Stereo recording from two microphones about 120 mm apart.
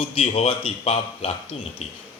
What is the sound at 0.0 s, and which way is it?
Speech, 55° left (ahead or behind).